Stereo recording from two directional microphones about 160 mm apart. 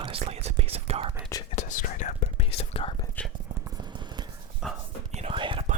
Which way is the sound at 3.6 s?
25° right (ahead or behind).